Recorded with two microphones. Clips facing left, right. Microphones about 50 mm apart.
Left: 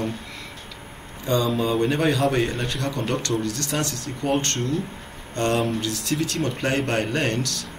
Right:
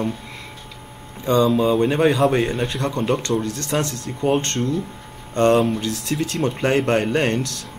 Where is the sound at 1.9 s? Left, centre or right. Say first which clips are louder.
Right 4 dB; right.